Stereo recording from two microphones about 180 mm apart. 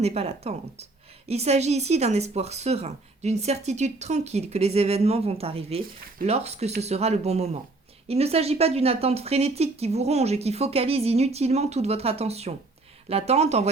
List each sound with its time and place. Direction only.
0.0 s a woman's voice: 35° right (ahead or behind)